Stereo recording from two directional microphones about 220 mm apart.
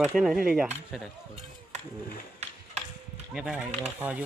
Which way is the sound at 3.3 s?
5° right (ahead or behind).